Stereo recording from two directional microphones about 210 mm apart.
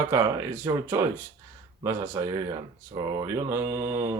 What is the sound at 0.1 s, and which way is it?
Speech, 15° right (ahead or behind).